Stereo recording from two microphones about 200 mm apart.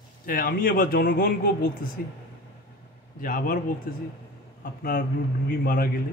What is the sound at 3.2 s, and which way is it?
Speech, 45° left (ahead or behind).